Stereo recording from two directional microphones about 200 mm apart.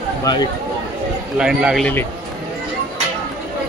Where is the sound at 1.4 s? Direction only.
5° right (ahead or behind).